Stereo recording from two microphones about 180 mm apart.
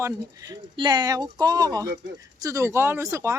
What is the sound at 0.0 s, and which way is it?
Speech, 20° right (ahead or behind).